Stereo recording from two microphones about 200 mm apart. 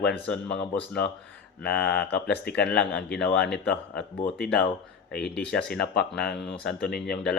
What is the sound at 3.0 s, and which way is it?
Speech, 55° left (ahead or behind).